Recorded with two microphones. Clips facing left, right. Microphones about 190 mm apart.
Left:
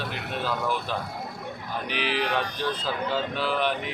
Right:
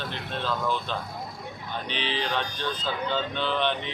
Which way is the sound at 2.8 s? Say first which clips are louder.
Right 2 dB; 5° left (ahead or behind).